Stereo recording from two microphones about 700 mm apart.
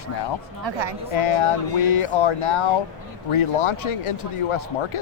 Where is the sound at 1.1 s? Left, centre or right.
Left.